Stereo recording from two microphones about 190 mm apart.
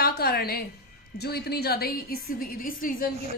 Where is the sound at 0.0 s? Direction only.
55° left (ahead or behind).